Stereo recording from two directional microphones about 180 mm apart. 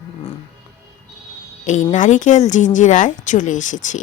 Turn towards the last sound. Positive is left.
turn(degrees=45)  # may be behind; listen again after turning